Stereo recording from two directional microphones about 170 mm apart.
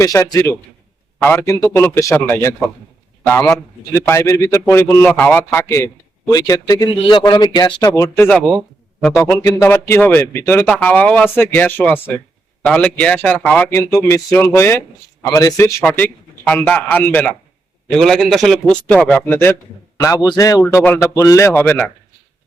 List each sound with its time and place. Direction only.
0.0 s a man's voice: 20° left (ahead or behind); by 8.6 s 5° left (ahead or behind)
9.3 s a man's voice: 15° left (ahead or behind)
15.8 s a man's voice: 10° left (ahead or behind)